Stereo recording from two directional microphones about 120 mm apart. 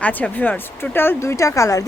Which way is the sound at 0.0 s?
15° left (ahead or behind).